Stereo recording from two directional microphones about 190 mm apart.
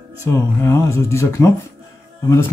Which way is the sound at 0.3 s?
15° left (ahead or behind).